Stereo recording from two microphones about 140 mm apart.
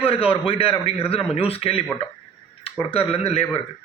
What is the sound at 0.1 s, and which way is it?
A man's voice, 40° left (ahead or behind).